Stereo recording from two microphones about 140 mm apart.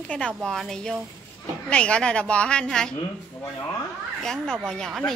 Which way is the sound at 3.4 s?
15° left (ahead or behind).